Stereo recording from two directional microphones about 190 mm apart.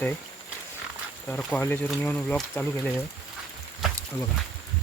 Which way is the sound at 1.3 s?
10° left (ahead or behind).